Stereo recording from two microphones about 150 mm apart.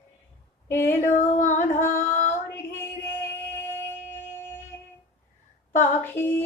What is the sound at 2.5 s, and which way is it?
Music, 15° left (ahead or behind).